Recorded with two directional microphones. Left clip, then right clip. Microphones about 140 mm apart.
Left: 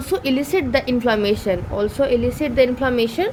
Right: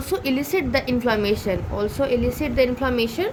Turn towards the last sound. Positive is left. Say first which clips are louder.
# left 3 dB
turn(degrees=25)  # may be behind; listen again after turning